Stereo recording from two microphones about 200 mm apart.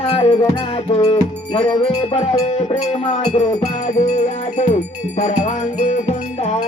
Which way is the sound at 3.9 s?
35° left (ahead or behind).